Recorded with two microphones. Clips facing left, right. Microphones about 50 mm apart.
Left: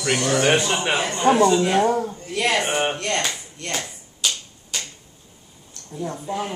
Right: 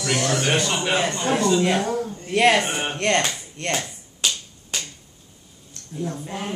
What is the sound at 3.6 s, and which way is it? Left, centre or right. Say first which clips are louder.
Speech: right 6 dB; right.